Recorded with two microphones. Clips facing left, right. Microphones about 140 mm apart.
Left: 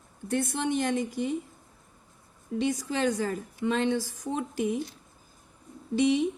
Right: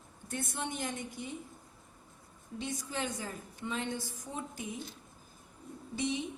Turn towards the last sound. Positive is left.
turn(degrees=80)